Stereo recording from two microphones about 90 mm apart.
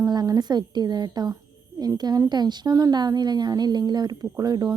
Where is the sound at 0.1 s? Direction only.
50° right (ahead or behind).